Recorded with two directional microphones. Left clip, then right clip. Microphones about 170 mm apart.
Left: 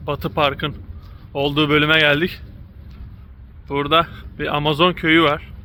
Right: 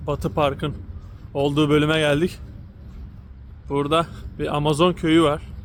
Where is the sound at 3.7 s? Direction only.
10° right (ahead or behind).